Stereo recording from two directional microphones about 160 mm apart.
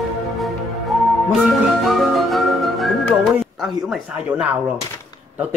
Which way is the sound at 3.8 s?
5° right (ahead or behind).